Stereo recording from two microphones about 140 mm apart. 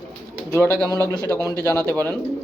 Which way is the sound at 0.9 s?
25° left (ahead or behind).